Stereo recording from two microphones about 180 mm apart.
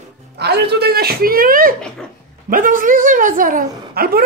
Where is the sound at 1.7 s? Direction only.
5° left (ahead or behind).